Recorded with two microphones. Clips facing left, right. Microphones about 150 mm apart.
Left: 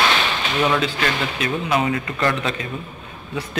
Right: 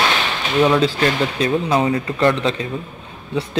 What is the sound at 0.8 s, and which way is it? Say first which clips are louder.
Speech: right 5 dB; 30° right (ahead or behind).